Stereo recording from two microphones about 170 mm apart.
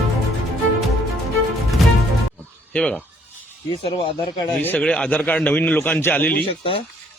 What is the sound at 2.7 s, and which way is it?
Speech, 5° left (ahead or behind).